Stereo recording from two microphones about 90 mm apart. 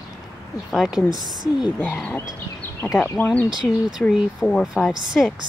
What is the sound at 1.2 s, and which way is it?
Speech, 50° right (ahead or behind).